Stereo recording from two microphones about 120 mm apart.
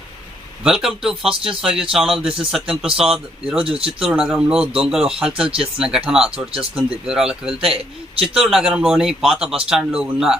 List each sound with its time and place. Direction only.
0.6 s speech: 5° right (ahead or behind)
3.8 s speech: 50° right (ahead or behind)
4.1 s speech: 10° right (ahead or behind)